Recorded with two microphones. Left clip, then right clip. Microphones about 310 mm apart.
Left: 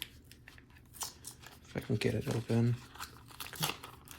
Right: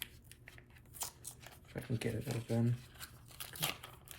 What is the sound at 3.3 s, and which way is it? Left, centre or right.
Crumpling, centre.